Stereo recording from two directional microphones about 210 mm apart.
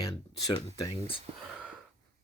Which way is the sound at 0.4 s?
15° left (ahead or behind).